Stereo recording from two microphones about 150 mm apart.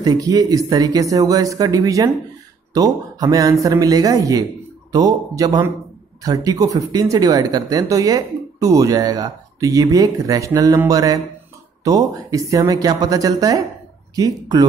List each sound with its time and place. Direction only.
0.0 s speech: 25° right (ahead or behind)